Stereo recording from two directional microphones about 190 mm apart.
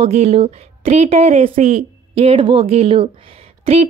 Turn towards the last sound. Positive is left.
turn(degrees=-30)  # may be behind; listen again after turning